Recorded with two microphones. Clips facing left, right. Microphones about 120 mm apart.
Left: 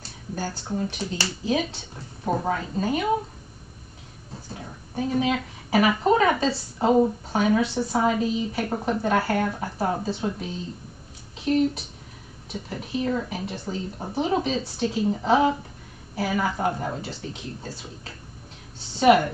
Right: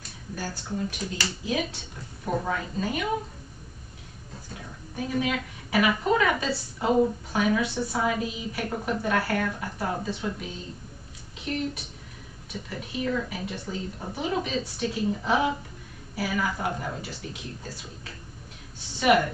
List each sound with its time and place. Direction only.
0.3 s speech: 35° left (ahead or behind)
4.5 s speech: 35° left (ahead or behind)
18.9 s speech: 35° left (ahead or behind)